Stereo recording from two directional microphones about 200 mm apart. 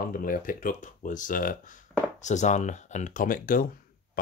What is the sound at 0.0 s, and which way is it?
Speech, 45° left (ahead or behind).